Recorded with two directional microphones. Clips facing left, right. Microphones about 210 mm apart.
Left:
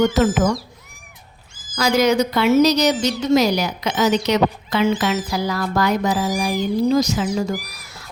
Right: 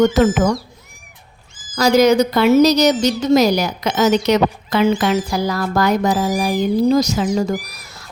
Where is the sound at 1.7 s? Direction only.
40° right (ahead or behind).